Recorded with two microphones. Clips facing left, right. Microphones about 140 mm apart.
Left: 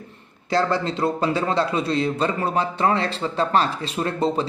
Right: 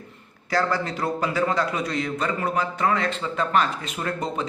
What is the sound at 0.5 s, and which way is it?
Speech, 25° left (ahead or behind).